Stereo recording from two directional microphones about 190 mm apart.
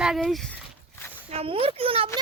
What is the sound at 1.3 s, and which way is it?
Speech, 30° right (ahead or behind).